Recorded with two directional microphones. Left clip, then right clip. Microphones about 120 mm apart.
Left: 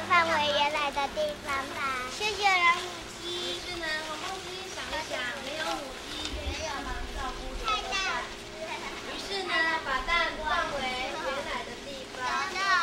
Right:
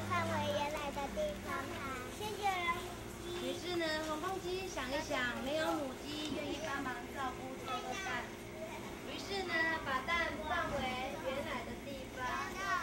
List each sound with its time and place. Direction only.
0.1 s children playing: 25° left (ahead or behind)
2.2 s children playing: 20° left (ahead or behind)
9.3 s a sound: 45° left (ahead or behind)